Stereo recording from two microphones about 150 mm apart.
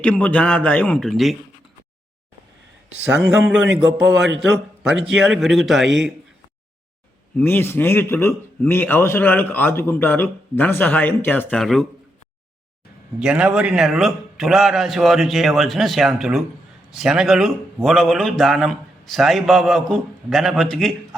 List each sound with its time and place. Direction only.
0.0 s a man's voice: 10° left (ahead or behind)
3.0 s a man's voice: 10° right (ahead or behind)
7.3 s a man's voice: 15° left (ahead or behind)
11.5 s a man's voice: centre (ahead or behind)
13.1 s a man's voice: 5° right (ahead or behind)